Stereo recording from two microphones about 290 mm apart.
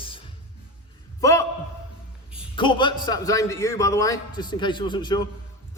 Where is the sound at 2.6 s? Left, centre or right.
Centre.